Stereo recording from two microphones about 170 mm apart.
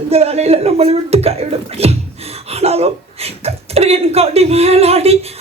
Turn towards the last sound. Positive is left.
turn(degrees=-35)  # may be behind; listen again after turning